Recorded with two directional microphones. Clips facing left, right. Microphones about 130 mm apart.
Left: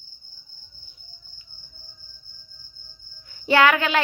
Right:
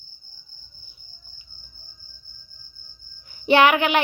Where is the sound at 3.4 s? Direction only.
20° right (ahead or behind).